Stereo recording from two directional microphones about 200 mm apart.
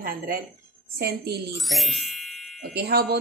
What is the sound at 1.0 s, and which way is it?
Speech, 55° right (ahead or behind).